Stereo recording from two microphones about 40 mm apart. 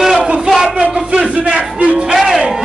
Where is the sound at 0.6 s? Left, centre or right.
Right.